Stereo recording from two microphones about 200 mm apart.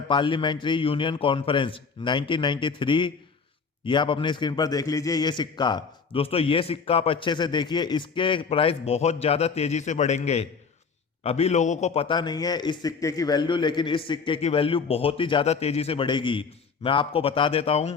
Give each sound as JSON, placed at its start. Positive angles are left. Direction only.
{"t": 0.1, "sound": "a man's voice", "side_deg": 25}